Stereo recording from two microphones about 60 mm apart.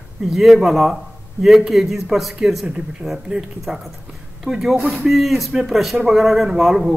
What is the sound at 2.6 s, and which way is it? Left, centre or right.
A man's voice, centre.